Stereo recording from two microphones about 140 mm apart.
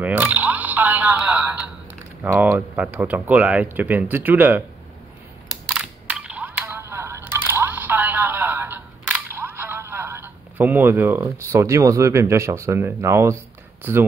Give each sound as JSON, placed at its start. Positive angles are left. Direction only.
{"t": 0.0, "sound": "telephone", "side_deg": -15}
{"t": 2.3, "sound": "speech", "side_deg": -15}
{"t": 5.8, "sound": "a sound", "side_deg": -5}
{"t": 11.3, "sound": "speech", "side_deg": -20}